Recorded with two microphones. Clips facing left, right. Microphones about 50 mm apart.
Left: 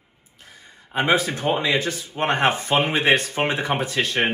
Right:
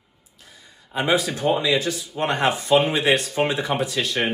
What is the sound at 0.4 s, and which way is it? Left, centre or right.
A man's voice, left.